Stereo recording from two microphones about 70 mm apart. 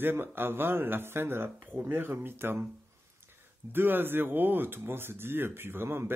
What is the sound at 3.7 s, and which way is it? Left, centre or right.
Speech, right.